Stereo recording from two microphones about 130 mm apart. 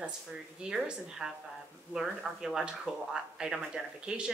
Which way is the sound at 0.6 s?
5° right (ahead or behind).